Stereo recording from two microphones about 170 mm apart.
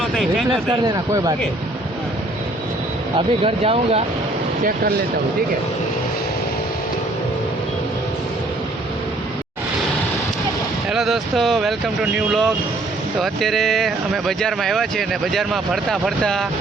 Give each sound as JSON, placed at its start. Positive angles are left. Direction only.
{"t": 0.0, "sound": "speech", "side_deg": 0}
{"t": 0.9, "sound": "speech", "side_deg": -20}
{"t": 3.2, "sound": "speech", "side_deg": -35}
{"t": 4.6, "sound": "speech", "side_deg": -60}
{"t": 10.8, "sound": "speech", "side_deg": 0}